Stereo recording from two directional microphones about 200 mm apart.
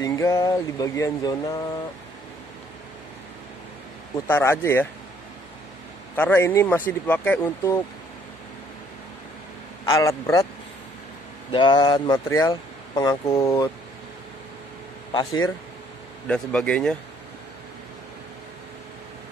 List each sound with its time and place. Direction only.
0.0 s speech: 15° left (ahead or behind)
4.3 s speech: 10° left (ahead or behind)
6.1 s speech: 10° left (ahead or behind)
9.8 s speech: 15° left (ahead or behind)
11.5 s speech: 20° left (ahead or behind)
16.3 s speech: 5° left (ahead or behind)